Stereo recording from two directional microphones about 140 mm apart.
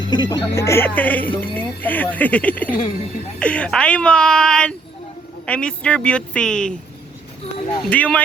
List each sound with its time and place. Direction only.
0.0 s speech: 30° left (ahead or behind); by 6.7 s 5° left (ahead or behind)
7.9 s speech: 10° left (ahead or behind)